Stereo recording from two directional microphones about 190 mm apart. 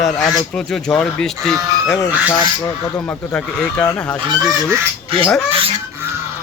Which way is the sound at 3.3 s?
5° left (ahead or behind).